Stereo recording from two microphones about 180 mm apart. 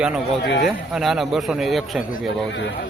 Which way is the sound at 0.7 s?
Centre (ahead or behind).